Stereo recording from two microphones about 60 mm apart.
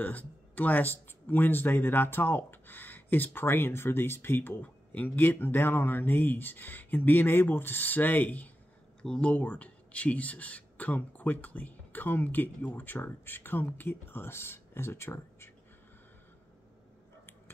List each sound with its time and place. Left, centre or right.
0.0 s speech: left
9.0 s speech: centre
9.3 s speech: left